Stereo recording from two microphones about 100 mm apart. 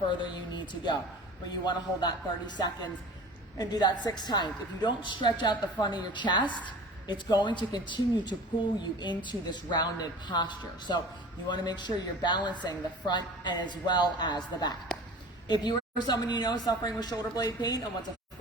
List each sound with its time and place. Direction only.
0.1 s a woman's voice: 50° left (ahead or behind)
3.6 s a woman's voice: 40° left (ahead or behind)